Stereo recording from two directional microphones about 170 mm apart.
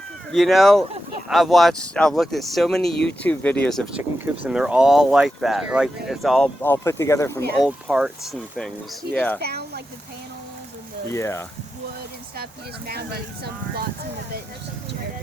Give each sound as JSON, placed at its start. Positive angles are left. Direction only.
{"t": 0.3, "sound": "speech", "side_deg": 0}
{"t": 6.6, "sound": "speech", "side_deg": 15}
{"t": 7.9, "sound": "speech", "side_deg": -5}
{"t": 9.4, "sound": "speech", "side_deg": -70}
{"t": 11.1, "sound": "speech", "side_deg": 15}
{"t": 12.9, "sound": "speech", "side_deg": -70}